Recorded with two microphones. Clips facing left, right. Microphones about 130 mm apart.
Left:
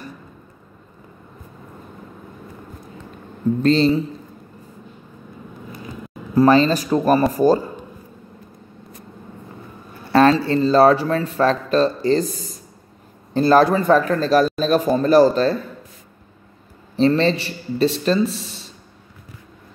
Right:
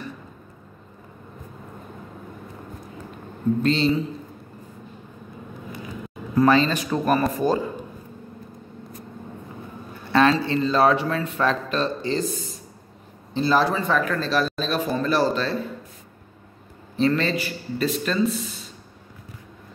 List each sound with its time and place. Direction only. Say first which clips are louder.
3.6 s speech: left 6 dB; 35° left (ahead or behind)
6.3 s a man's voice: left 4 dB; 35° left (ahead or behind)
10.4 s speech: left 6 dB; 40° left (ahead or behind)
13.9 s speech: left 8 dB; 35° left (ahead or behind)
16.9 s speech: left 5 dB; 30° left (ahead or behind)